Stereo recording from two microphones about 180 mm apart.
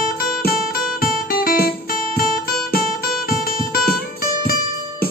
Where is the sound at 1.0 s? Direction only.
55° left (ahead or behind).